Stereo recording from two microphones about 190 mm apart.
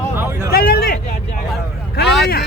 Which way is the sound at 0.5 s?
55° left (ahead or behind).